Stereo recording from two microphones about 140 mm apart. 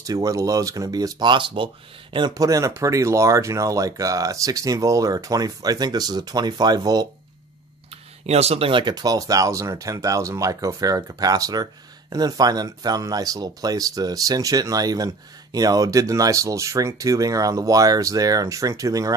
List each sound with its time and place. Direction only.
0.0 s speech: 25° right (ahead or behind)
8.3 s speech: 50° right (ahead or behind); by 19.1 s 25° right (ahead or behind)